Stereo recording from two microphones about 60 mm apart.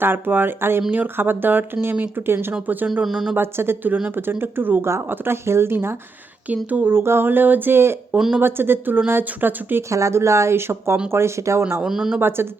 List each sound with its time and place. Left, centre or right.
0.0 s speech: right
2.6 s speech: right
2.9 s speech: centre
3.3 s speech: right
6.7 s speech: right
6.9 s speech: right
9.9 s speech: right
11.9 s speech: centre